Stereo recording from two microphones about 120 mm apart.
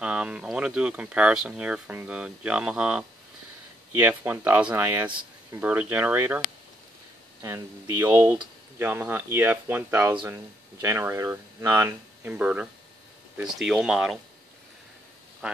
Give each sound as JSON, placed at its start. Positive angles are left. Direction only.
{"t": 0.0, "sound": "speech", "side_deg": -10}
{"t": 7.4, "sound": "speech", "side_deg": -25}
{"t": 15.4, "sound": "speech", "side_deg": -10}